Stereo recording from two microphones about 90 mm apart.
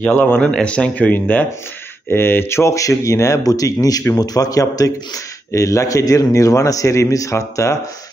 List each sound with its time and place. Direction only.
0.4 s a man's voice: 10° left (ahead or behind); by 7.7 s 35° left (ahead or behind)